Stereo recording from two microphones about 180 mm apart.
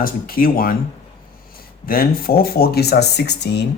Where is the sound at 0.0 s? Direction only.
55° left (ahead or behind).